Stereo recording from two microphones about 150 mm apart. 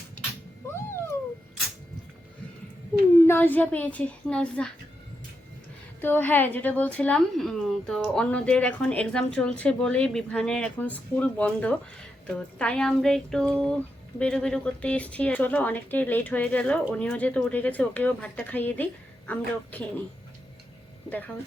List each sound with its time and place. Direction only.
0.7 s cat: 15° left (ahead or behind)
3.2 s speech: 10° left (ahead or behind)
6.0 s speech: 15° left (ahead or behind)